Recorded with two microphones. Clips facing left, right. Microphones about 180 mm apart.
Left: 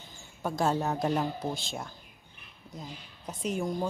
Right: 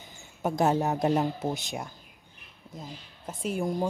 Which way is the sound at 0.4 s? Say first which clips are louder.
Right 3 dB; 20° right (ahead or behind).